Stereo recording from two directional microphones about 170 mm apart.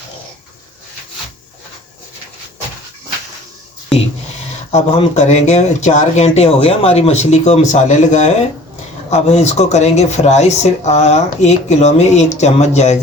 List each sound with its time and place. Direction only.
4.7 s speech: 40° left (ahead or behind)